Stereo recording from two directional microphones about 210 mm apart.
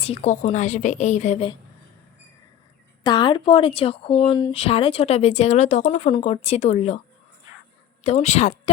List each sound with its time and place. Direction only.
0.0 s a woman's voice: 30° left (ahead or behind)
3.0 s speech: 20° left (ahead or behind)
8.0 s a woman's voice: 30° left (ahead or behind)